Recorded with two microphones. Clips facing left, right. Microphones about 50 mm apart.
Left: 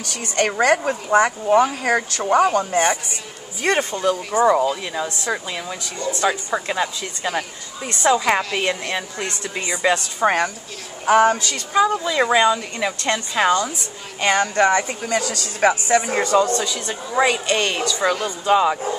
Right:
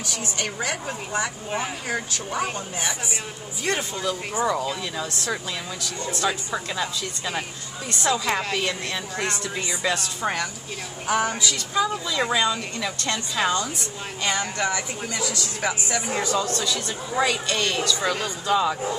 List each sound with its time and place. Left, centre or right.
0.0 s speech: left
3.6 s speech: left
4.3 s speech: left
16.3 s speech: left